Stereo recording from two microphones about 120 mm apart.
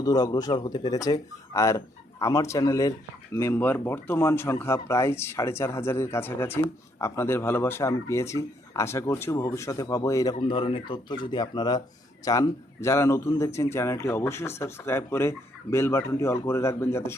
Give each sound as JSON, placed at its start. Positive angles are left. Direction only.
{"t": 0.0, "sound": "speech", "side_deg": 30}
{"t": 10.5, "sound": "speech", "side_deg": 50}